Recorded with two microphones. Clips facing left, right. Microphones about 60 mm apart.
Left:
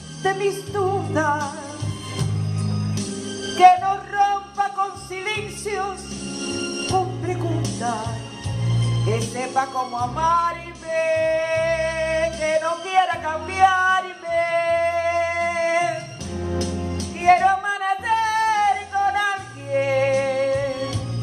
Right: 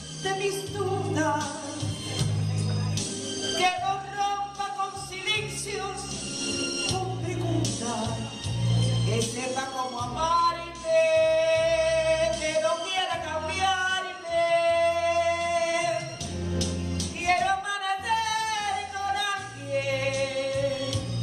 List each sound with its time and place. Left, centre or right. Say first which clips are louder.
0.2 s music: left 7 dB; left